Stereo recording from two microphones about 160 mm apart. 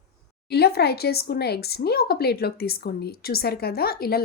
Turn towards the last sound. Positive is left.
turn(degrees=70)  # may be behind; listen again after turning